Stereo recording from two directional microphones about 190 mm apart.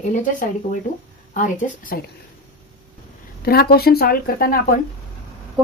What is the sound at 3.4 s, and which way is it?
Speech, 55° left (ahead or behind).